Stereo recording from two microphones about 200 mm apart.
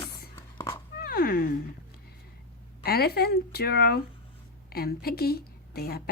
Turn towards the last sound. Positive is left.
turn(degrees=50)  # may be behind; listen again after turning